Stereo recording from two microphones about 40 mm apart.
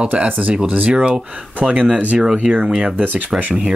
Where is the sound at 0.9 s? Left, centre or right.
Right.